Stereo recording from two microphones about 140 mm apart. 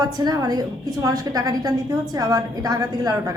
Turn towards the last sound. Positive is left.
turn(degrees=-25)  # may be behind; listen again after turning